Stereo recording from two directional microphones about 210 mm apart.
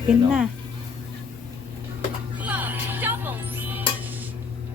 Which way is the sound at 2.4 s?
5° right (ahead or behind).